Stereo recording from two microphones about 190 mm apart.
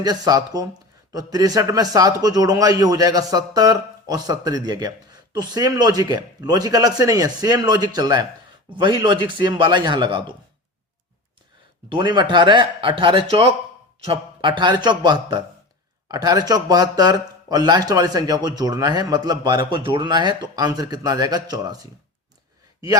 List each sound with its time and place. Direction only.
0.0 s speech: 20° right (ahead or behind)
11.9 s speech: 25° right (ahead or behind)